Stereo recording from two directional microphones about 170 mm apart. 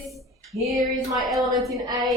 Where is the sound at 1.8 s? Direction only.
25° right (ahead or behind).